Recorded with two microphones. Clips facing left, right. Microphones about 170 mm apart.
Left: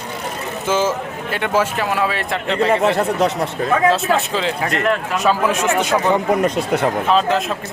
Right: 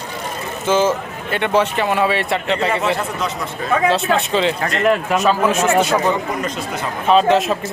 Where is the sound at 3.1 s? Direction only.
70° left (ahead or behind).